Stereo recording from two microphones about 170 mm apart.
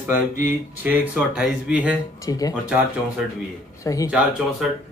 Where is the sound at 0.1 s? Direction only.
10° right (ahead or behind).